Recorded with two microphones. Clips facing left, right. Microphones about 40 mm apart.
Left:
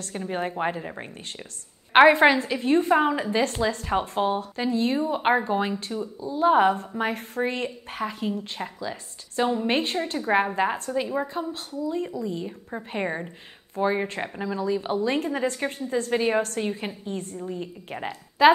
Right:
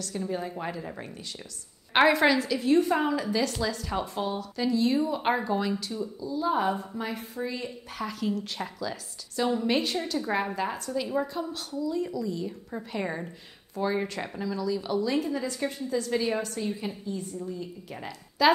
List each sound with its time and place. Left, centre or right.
0.0 s a woman's voice: left
7.9 s a woman's voice: left
11.1 s a woman's voice: left